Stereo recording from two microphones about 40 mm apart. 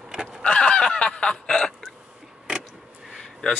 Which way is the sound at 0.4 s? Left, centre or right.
Left.